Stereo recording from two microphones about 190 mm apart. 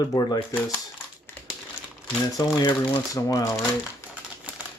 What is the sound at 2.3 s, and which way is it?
Speech, 20° left (ahead or behind).